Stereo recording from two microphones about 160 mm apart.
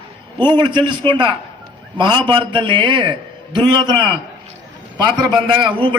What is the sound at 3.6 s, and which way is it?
Speech, 10° left (ahead or behind).